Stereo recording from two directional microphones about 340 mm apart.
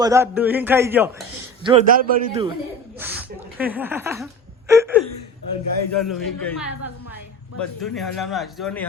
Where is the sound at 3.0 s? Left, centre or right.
Centre.